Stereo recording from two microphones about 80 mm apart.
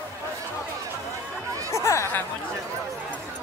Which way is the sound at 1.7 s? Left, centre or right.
Left.